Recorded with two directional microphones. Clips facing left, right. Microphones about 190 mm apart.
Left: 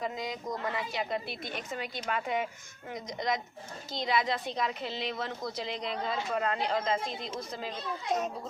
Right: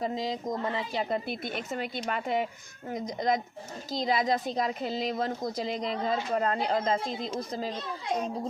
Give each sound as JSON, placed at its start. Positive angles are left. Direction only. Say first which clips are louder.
{"t": 0.0, "sound": "speech", "louder": "right 4 dB", "side_deg": -30}
{"t": 1.1, "sound": "speech", "louder": "right 4 dB", "side_deg": -45}